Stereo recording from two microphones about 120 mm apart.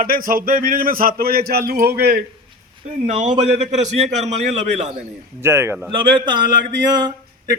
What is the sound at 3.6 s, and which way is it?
A man's voice, 65° right (ahead or behind).